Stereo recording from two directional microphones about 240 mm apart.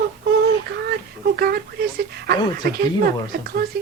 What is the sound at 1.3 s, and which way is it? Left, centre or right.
A woman's voice, right.